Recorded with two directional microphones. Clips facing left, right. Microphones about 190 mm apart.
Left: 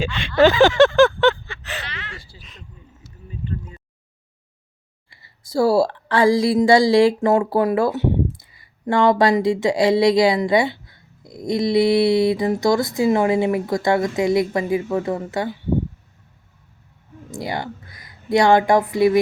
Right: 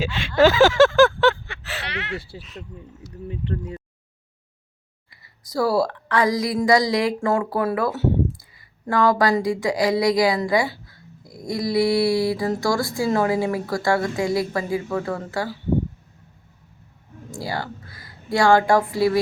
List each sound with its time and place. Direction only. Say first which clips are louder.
0.0 s a sound: left 1 dB; centre (ahead or behind)
1.8 s a sound: right 6 dB; 65° right (ahead or behind)
2.4 s speech: right 7 dB; centre (ahead or behind)
3.2 s speech: right 3 dB; 75° right (ahead or behind)
5.2 s a woman's voice: left 4 dB; 25° left (ahead or behind)
17.3 s a woman's voice: left 2 dB; 20° left (ahead or behind)